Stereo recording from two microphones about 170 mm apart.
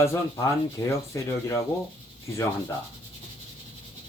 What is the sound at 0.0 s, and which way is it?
Speech, 20° left (ahead or behind).